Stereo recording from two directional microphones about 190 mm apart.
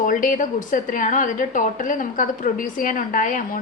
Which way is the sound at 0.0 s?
45° left (ahead or behind).